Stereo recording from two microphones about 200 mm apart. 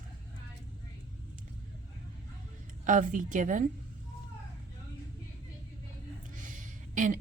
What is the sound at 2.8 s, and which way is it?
Speech, 40° right (ahead or behind).